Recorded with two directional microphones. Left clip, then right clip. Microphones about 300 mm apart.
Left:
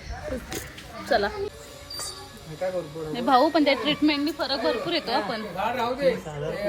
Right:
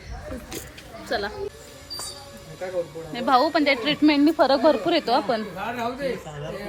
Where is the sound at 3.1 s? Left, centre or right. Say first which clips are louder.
Even; centre.